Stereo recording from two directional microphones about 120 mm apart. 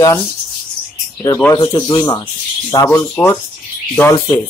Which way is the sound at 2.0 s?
35° left (ahead or behind).